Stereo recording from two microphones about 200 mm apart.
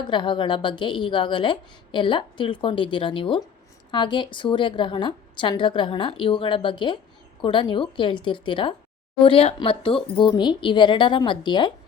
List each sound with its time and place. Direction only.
0.0 s a woman's voice: 25° left (ahead or behind)